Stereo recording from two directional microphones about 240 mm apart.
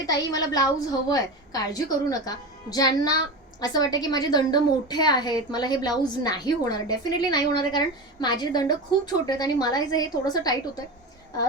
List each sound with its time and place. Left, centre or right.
0.0 s a woman's voice: centre